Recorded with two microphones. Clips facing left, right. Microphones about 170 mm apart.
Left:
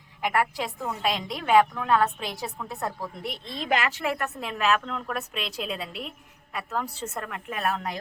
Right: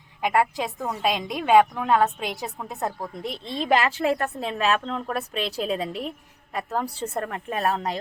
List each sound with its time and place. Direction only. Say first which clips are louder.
0.2 s a woman's voice: right 3 dB; 20° right (ahead or behind)
3.6 s a woman's voice: right 5 dB; 30° right (ahead or behind)